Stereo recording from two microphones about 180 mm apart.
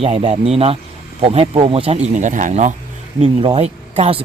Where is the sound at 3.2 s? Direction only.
30° right (ahead or behind).